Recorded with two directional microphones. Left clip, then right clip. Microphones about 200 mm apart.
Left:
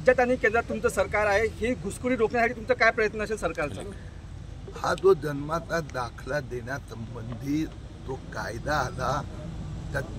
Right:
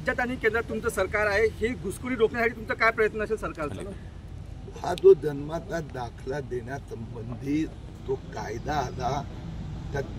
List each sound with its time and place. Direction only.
0.0 s speech: 55° left (ahead or behind)
4.7 s a man's voice: 5° left (ahead or behind)
8.4 s a man's voice: 5° left (ahead or behind)